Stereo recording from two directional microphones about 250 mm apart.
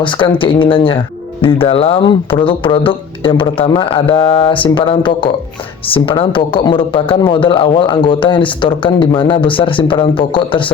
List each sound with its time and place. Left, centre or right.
0.0 s speech: centre